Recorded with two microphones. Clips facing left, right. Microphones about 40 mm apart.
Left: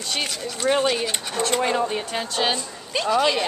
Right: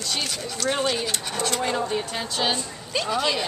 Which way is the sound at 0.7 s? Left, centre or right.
Centre.